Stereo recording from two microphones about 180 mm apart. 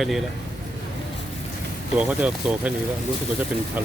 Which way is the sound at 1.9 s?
5° right (ahead or behind).